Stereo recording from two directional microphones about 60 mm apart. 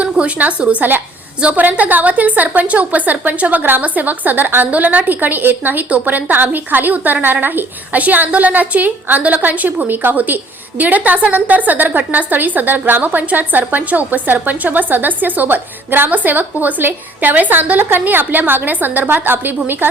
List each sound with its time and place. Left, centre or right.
0.0 s a woman's voice: right